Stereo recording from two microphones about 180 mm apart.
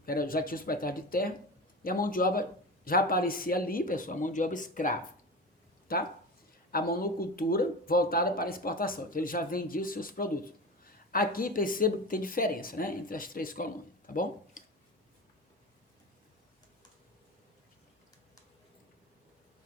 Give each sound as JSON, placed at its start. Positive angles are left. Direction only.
{"t": 0.0, "sound": "speech", "side_deg": 55}